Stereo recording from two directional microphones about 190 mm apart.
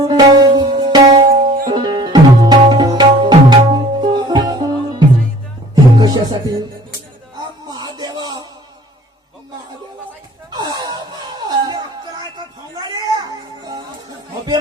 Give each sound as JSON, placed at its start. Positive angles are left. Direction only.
{"t": 0.0, "sound": "music", "side_deg": -20}
{"t": 1.3, "sound": "music", "side_deg": -45}
{"t": 1.7, "sound": "tabla", "side_deg": -25}
{"t": 5.7, "sound": "music", "side_deg": -20}
{"t": 7.7, "sound": "a sound", "side_deg": -20}
{"t": 10.5, "sound": "a sound", "side_deg": -20}
{"t": 11.3, "sound": "music", "side_deg": -20}
{"t": 12.9, "sound": "music", "side_deg": -20}